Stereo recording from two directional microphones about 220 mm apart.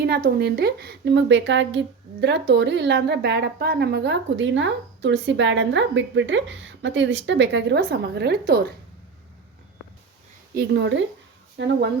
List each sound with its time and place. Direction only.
0.0 s speech: 45° right (ahead or behind)
10.5 s speech: 45° right (ahead or behind)